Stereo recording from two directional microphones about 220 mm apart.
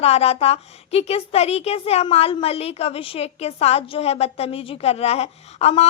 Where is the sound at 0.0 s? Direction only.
30° left (ahead or behind).